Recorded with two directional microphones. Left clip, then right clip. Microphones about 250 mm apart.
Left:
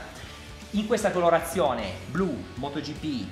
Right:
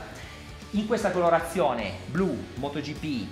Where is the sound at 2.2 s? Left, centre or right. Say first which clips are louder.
Right 1 dB; right.